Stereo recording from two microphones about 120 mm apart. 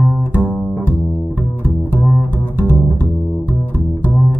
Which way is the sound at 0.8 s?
15° left (ahead or behind).